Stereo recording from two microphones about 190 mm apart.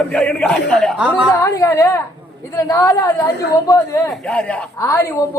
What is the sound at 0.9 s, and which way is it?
Speech, 5° right (ahead or behind).